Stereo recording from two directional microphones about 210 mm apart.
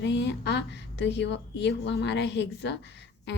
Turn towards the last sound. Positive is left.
turn(degrees=55)  # may be behind; listen again after turning